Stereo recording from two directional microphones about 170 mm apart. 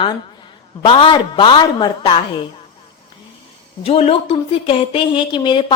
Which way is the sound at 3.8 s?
35° left (ahead or behind).